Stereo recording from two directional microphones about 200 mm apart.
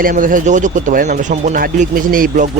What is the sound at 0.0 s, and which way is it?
Speech, 45° right (ahead or behind).